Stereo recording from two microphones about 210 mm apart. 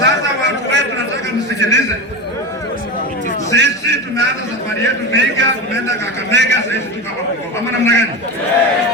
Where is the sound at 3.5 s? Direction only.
55° right (ahead or behind).